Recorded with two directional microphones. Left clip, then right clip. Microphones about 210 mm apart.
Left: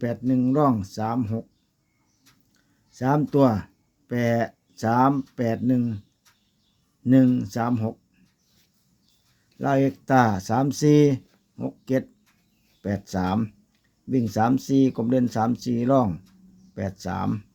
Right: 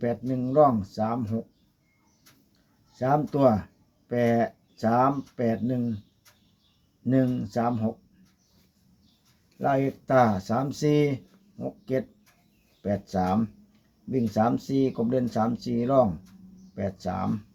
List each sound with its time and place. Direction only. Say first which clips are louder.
0.0 s speech: left 4 dB; 60° left (ahead or behind)
2.9 s speech: left 2 dB; 60° left (ahead or behind)
7.1 s speech: left 5 dB; 60° left (ahead or behind)
9.6 s speech: left 2 dB; 60° left (ahead or behind)